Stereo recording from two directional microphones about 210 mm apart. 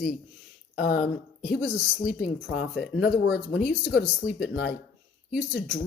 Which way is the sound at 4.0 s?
40° left (ahead or behind).